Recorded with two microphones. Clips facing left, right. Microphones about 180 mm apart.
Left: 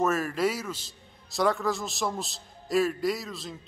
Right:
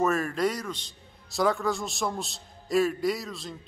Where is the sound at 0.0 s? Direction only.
Centre (ahead or behind).